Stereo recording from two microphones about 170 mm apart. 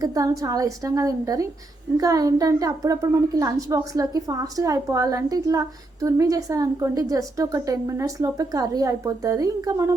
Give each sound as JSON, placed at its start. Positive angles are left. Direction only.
{"t": 0.0, "sound": "a woman's voice", "side_deg": -20}